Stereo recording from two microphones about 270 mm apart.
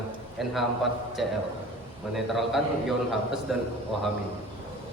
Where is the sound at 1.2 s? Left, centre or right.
Centre.